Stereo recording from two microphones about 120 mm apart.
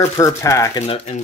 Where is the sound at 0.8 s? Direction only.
55° left (ahead or behind).